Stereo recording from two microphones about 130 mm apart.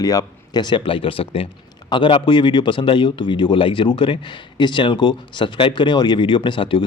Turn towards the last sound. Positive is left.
turn(degrees=40)  # may be behind; listen again after turning